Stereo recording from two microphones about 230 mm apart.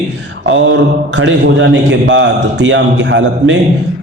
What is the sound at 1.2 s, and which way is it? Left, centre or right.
A man's voice, right.